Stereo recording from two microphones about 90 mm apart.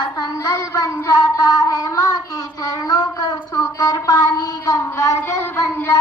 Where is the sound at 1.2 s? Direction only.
45° left (ahead or behind).